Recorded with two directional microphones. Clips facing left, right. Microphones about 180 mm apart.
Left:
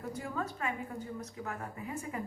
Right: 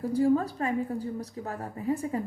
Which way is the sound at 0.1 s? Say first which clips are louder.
Right 15 dB; 35° right (ahead or behind).